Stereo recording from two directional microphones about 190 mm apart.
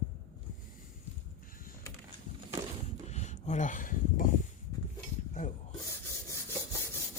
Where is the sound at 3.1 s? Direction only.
35° left (ahead or behind).